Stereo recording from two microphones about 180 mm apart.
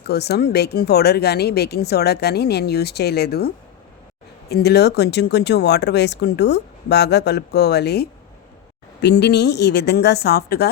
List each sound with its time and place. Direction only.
0.0 s speech: 65° left (ahead or behind)